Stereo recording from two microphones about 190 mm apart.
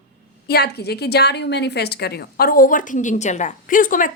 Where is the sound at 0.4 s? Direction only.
55° left (ahead or behind).